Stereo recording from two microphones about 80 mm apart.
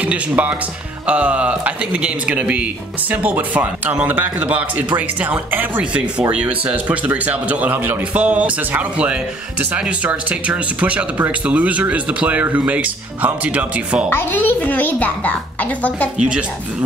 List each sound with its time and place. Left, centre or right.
0.0 s speech: centre
14.0 s a child's voice: left
16.2 s speech: centre